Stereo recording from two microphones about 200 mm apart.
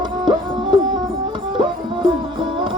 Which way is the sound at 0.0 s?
20° right (ahead or behind).